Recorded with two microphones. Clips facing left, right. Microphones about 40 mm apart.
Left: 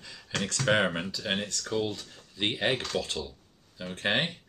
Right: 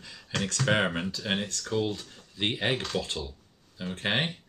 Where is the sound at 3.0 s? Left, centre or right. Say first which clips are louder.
Even; centre.